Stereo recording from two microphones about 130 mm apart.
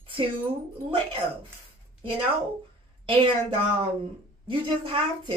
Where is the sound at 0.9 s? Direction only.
40° right (ahead or behind).